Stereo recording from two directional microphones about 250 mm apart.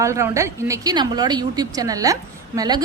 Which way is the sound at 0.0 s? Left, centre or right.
Centre.